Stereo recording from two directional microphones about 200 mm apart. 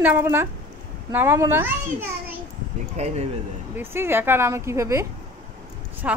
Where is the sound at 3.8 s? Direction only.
10° right (ahead or behind).